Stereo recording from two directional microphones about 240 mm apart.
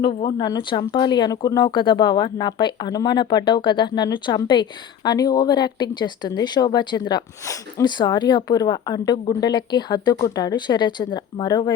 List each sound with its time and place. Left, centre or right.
0.0 s speech: left